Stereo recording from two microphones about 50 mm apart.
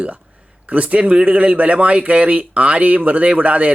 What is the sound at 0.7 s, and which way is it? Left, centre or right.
Speech, right.